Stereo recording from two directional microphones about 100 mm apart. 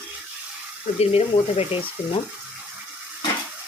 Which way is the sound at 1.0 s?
80° left.